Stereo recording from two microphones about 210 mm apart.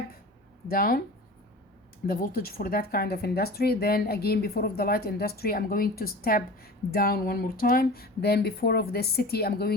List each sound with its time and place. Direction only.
0.7 s speech: 45° left (ahead or behind)
2.0 s speech: 45° left (ahead or behind)